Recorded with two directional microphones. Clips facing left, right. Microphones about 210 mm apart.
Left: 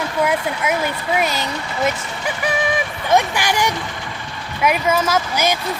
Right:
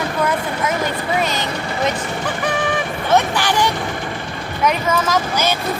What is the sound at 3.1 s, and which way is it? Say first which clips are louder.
Speech: even; 10° left (ahead or behind).